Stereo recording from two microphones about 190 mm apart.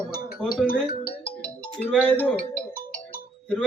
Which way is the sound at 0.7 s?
55° left (ahead or behind).